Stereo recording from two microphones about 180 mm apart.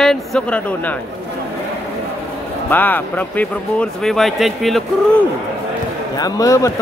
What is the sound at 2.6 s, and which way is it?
Speech, 10° left (ahead or behind).